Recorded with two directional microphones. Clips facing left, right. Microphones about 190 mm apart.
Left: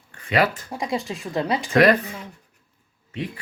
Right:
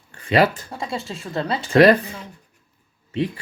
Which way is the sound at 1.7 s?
30° right (ahead or behind).